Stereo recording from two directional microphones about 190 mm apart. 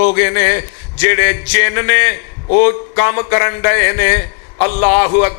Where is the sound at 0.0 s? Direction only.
20° left (ahead or behind).